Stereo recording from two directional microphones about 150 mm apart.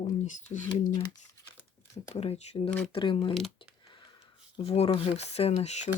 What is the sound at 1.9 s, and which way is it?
Speech, 45° left (ahead or behind).